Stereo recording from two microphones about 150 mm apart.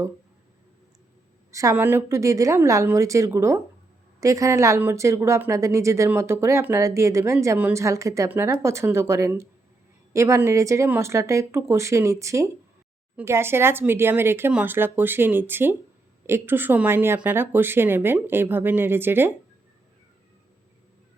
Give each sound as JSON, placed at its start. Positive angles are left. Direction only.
{"t": 1.5, "sound": "speech", "side_deg": -20}